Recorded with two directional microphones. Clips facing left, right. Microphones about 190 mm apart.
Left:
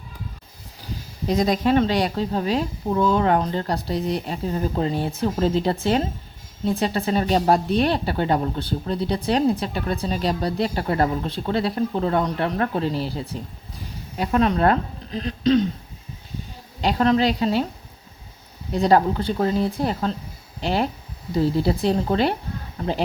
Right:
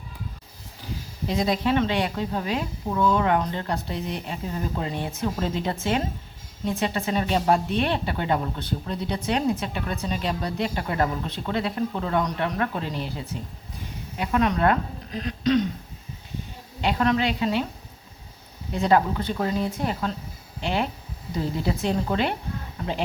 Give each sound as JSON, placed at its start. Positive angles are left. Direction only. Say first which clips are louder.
{"t": 1.3, "sound": "speech", "louder": "left 4 dB", "side_deg": 45}
{"t": 16.8, "sound": "speech", "louder": "left 4 dB", "side_deg": 35}
{"t": 18.7, "sound": "speech", "louder": "left 3 dB", "side_deg": 35}